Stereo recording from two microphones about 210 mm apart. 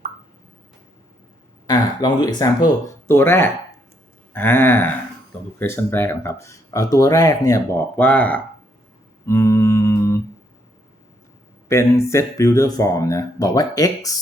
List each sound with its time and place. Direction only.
1.6 s speech: 20° left (ahead or behind)
9.2 s a sound: 15° left (ahead or behind)
11.7 s speech: 15° left (ahead or behind)